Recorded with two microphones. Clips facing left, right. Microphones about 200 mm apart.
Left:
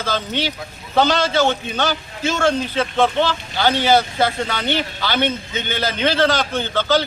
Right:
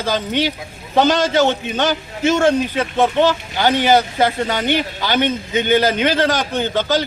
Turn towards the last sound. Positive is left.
turn(degrees=-15)  # may be behind; listen again after turning